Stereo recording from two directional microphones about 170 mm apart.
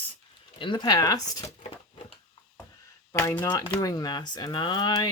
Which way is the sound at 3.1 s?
15° left (ahead or behind).